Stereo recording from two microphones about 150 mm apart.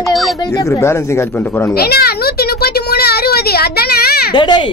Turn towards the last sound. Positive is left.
turn(degrees=30)  # may be behind; listen again after turning